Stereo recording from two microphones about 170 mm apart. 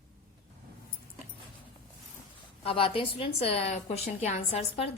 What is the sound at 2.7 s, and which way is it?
A woman's voice, 35° left (ahead or behind).